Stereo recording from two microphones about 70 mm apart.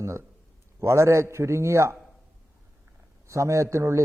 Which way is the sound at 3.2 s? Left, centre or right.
Right.